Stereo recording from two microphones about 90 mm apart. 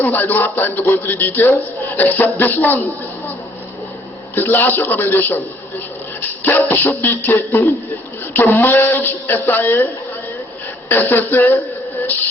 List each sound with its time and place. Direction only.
0.0 s a man's voice: 20° left (ahead or behind)
4.4 s a man's voice: 20° left (ahead or behind)
6.4 s a man's voice: 20° left (ahead or behind)
10.8 s a man's voice: 20° left (ahead or behind)